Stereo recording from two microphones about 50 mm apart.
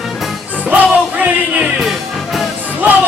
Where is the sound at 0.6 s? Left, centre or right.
Right.